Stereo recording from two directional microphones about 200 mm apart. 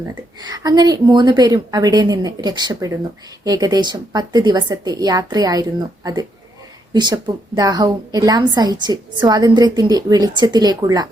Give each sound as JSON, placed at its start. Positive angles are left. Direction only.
{"t": 0.4, "sound": "a woman's voice", "side_deg": -20}